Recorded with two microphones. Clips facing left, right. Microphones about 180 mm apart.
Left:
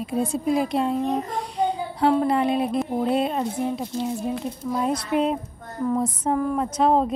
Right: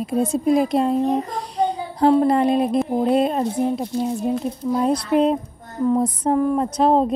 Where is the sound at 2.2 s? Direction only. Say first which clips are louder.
Right 4 dB; 40° right (ahead or behind).